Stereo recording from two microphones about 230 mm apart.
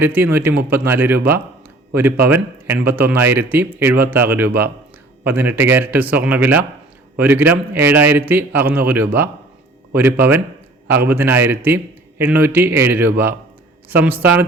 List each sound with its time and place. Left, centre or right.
0.0 s speech: centre